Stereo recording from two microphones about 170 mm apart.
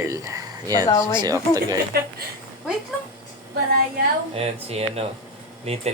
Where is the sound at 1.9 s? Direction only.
65° right (ahead or behind).